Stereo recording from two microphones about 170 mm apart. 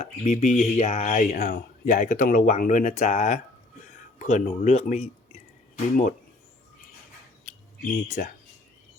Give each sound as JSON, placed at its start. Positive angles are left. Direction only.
{"t": 0.0, "sound": "speech", "side_deg": 40}
{"t": 8.0, "sound": "speech", "side_deg": 50}